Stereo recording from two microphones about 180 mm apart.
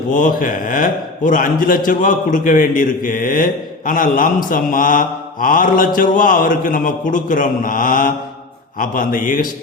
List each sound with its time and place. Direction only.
0.1 s a man's voice: 50° left (ahead or behind)